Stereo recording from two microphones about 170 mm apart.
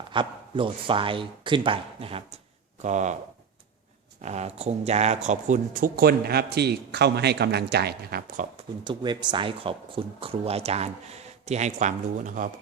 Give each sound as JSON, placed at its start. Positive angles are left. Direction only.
{"t": 0.1, "sound": "speech", "side_deg": -30}
{"t": 2.8, "sound": "speech", "side_deg": -45}
{"t": 4.2, "sound": "speech", "side_deg": -40}
{"t": 8.4, "sound": "speech", "side_deg": -50}
{"t": 8.8, "sound": "speech", "side_deg": -25}